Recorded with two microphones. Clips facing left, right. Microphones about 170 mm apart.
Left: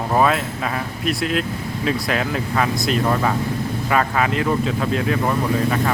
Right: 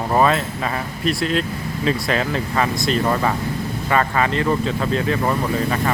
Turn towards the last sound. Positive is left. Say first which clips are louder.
# left 1 dB
turn(degrees=0)  # may be behind; listen again after turning